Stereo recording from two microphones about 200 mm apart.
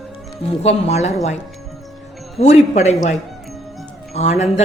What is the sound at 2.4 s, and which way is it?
A woman's voice, 35° left (ahead or behind).